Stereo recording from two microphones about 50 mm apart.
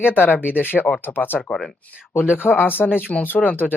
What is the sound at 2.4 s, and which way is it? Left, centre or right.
Speech, left.